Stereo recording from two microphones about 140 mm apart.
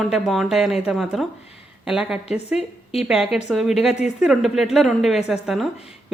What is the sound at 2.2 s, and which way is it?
Speech, 50° left (ahead or behind).